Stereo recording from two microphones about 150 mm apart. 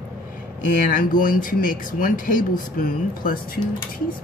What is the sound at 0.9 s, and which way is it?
Speech, 60° left (ahead or behind).